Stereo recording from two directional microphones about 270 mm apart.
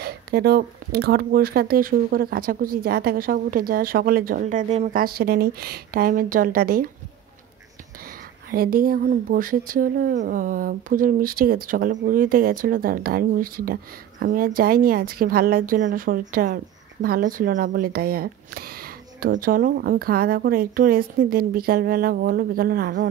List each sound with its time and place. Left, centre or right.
0.0 s speech: right
8.5 s speech: right